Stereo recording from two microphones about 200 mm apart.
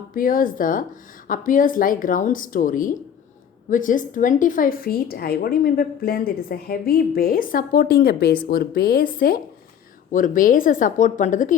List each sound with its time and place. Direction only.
0.1 s a woman's voice: 45° left (ahead or behind)